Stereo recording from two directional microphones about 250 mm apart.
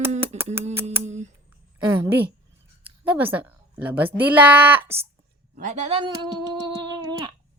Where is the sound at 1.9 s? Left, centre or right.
Centre.